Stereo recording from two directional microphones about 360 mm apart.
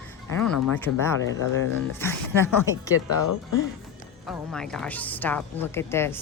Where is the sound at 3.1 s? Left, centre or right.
Left.